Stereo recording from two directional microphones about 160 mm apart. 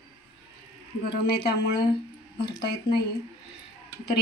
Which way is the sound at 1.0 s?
75° left (ahead or behind).